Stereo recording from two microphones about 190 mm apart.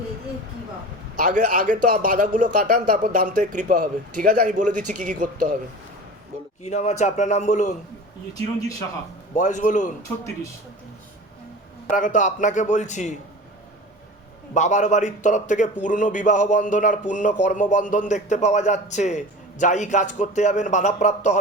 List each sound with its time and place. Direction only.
1.2 s a man's voice: 40° right (ahead or behind)
6.6 s a man's voice: 35° left (ahead or behind)
9.3 s a man's voice: 40° left (ahead or behind)
11.9 s a man's voice: 45° left (ahead or behind)
14.5 s a man's voice: 40° left (ahead or behind)